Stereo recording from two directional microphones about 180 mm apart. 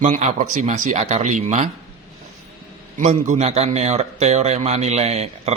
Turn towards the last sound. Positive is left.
turn(degrees=-35)  # may be behind; listen again after turning